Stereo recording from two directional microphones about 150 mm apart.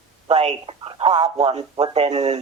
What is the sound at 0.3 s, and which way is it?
Speech, 45° right (ahead or behind).